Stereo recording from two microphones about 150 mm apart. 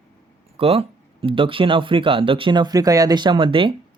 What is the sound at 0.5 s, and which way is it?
Speech, 40° right (ahead or behind).